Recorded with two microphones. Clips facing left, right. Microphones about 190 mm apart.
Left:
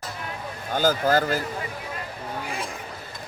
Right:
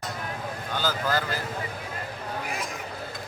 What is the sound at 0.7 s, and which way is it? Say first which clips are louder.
Speech: left 7 dB; 45° left (ahead or behind).